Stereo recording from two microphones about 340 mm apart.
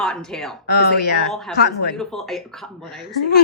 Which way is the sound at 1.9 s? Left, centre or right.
Centre.